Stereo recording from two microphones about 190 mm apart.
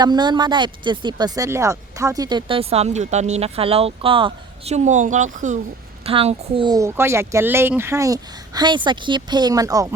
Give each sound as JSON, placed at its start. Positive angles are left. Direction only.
{"t": 0.0, "sound": "speech", "side_deg": -20}
{"t": 6.1, "sound": "speech", "side_deg": -30}